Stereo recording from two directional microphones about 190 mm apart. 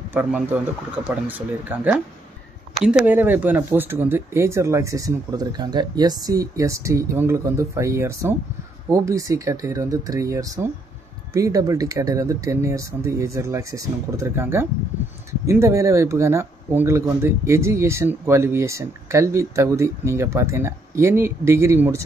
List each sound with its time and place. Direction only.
0.1 s speech: 10° right (ahead or behind)